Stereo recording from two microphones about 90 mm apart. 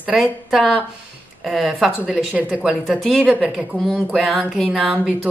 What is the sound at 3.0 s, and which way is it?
Speech, 5° left (ahead or behind).